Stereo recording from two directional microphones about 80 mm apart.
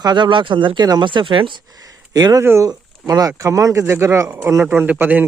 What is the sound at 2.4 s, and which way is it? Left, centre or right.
Speech, right.